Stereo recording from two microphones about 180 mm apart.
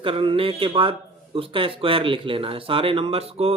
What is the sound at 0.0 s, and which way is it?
A man's voice, 30° right (ahead or behind).